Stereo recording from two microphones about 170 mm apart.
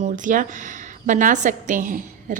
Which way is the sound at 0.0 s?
50° right (ahead or behind).